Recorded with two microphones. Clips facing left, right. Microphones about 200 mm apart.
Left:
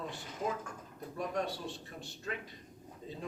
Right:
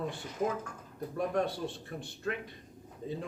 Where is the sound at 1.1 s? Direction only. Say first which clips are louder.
Right 5 dB; 55° right (ahead or behind).